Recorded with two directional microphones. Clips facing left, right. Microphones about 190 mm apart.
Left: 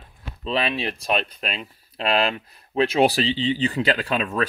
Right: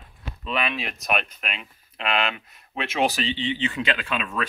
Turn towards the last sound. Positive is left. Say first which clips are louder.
# left 5 dB
turn(degrees=40)  # may be behind; listen again after turning